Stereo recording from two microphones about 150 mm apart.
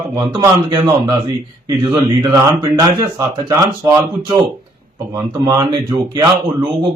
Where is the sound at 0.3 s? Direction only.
25° right (ahead or behind).